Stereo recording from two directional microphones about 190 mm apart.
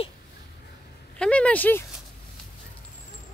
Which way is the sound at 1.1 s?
5° left (ahead or behind).